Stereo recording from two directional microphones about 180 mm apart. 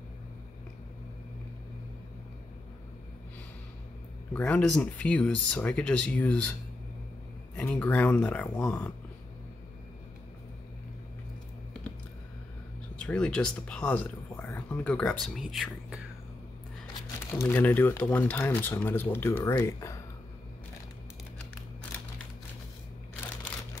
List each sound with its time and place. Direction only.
4.3 s speech: 5° left (ahead or behind)
7.5 s speech: 10° left (ahead or behind)
12.9 s speech: 5° left (ahead or behind)
17.3 s speech: 10° left (ahead or behind)